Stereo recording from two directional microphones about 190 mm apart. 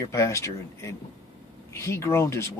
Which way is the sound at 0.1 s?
15° left (ahead or behind).